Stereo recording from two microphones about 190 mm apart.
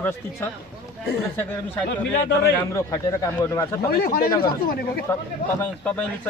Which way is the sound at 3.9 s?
55° left (ahead or behind).